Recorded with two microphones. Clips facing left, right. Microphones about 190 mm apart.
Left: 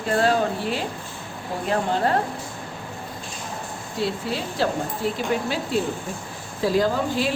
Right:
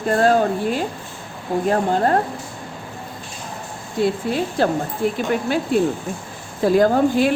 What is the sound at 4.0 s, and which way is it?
A woman's voice, 55° right (ahead or behind).